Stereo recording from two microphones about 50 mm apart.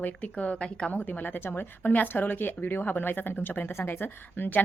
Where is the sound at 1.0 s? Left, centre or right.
Left.